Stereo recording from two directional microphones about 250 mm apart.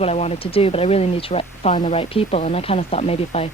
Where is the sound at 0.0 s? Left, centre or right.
Left.